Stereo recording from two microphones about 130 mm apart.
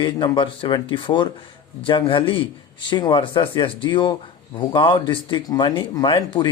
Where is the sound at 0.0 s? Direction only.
40° left (ahead or behind).